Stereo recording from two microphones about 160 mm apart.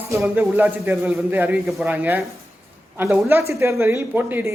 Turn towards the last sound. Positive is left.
turn(degrees=-10)  # may be behind; listen again after turning